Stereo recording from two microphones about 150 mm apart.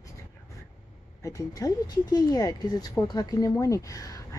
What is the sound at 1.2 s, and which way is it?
Speech, 20° left (ahead or behind).